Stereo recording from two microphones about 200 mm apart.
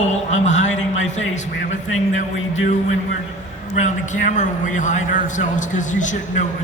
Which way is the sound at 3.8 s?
40° left (ahead or behind).